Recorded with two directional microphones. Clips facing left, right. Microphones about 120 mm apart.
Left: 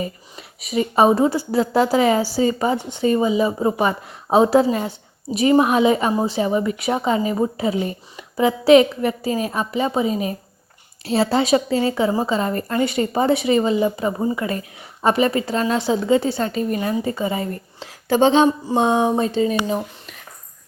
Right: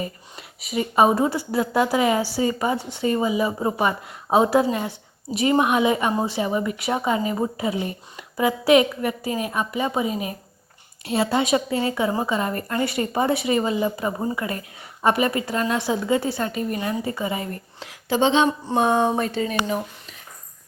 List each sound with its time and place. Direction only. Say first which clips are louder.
0.0 s a woman's voice: left 3 dB; 25° left (ahead or behind)
18.1 s speech: left 4 dB; 45° left (ahead or behind)
18.8 s a woman's voice: left 2 dB; 15° left (ahead or behind)